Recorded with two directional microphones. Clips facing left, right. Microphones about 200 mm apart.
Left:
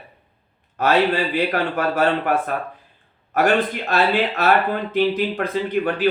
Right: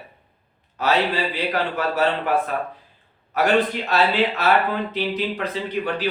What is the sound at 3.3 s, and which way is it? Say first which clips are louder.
A man's voice: left 1 dB; 50° left (ahead or behind).